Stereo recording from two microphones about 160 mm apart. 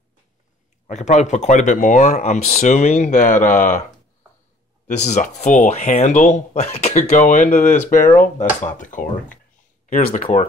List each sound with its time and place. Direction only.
0.8 s speech: 45° left (ahead or behind)
4.8 s speech: 50° left (ahead or behind)